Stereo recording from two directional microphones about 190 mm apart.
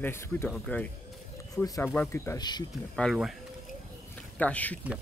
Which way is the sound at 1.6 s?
15° left (ahead or behind).